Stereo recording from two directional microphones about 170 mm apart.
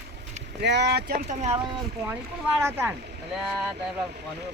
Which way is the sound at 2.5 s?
15° right (ahead or behind).